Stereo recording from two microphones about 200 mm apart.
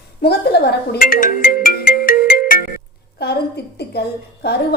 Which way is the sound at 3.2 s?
55° left (ahead or behind).